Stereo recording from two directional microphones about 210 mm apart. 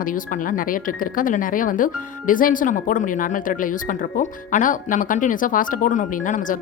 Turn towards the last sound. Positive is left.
turn(degrees=40)  # may be behind; listen again after turning